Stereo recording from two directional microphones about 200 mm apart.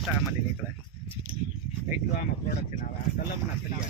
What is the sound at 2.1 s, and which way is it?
Speech, 40° left (ahead or behind).